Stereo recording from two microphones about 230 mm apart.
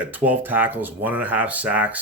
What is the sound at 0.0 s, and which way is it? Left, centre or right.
Speech, centre.